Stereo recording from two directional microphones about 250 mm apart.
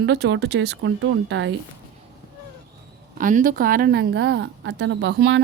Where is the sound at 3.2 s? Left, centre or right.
Right.